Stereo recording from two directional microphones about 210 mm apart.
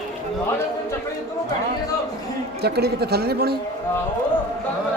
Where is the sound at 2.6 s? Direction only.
50° right (ahead or behind).